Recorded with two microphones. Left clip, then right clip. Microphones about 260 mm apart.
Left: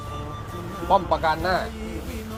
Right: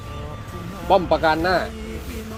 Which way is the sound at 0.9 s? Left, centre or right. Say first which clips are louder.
Right 3 dB; right.